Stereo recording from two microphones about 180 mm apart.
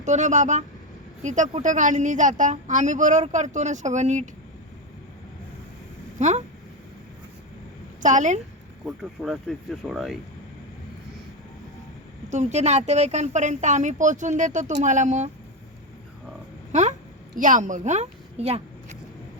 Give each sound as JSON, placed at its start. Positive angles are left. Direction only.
{"t": 0.0, "sound": "a woman's voice", "side_deg": -40}
{"t": 6.1, "sound": "speech", "side_deg": -40}
{"t": 8.0, "sound": "a woman's voice", "side_deg": -45}
{"t": 8.9, "sound": "speech", "side_deg": 0}
{"t": 12.3, "sound": "speech", "side_deg": -40}
{"t": 17.3, "sound": "speech", "side_deg": -45}